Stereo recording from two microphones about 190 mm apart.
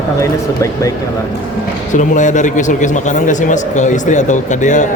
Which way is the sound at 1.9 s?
40° left (ahead or behind).